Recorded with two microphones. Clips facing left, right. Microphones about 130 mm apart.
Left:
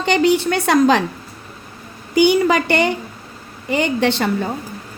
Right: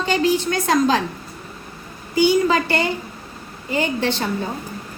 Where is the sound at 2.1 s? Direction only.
65° left (ahead or behind).